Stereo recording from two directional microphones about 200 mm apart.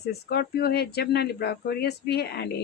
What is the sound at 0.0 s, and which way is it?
Speech, 55° left (ahead or behind).